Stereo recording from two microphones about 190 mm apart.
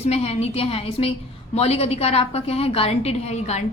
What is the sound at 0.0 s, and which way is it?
A woman's voice, 35° left (ahead or behind).